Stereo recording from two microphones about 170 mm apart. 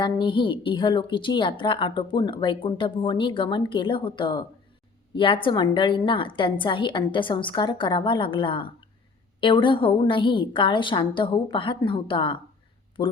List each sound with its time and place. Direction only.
0.0 s a woman's voice: 30° left (ahead or behind)